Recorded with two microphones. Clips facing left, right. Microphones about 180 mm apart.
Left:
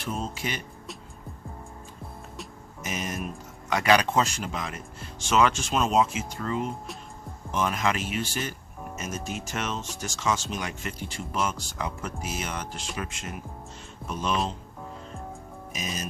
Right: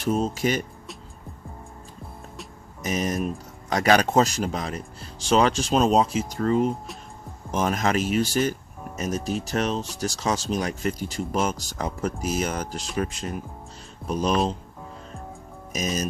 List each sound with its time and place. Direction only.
0.0 s speech: 40° right (ahead or behind)
2.8 s speech: 40° right (ahead or behind)
15.7 s speech: 40° right (ahead or behind)